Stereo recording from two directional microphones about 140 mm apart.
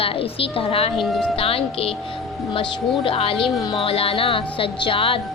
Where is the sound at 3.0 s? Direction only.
45° left (ahead or behind).